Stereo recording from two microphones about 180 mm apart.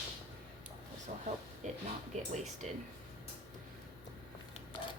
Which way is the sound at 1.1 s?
40° right (ahead or behind).